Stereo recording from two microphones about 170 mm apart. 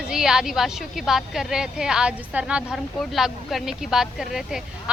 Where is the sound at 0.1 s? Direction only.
5° right (ahead or behind).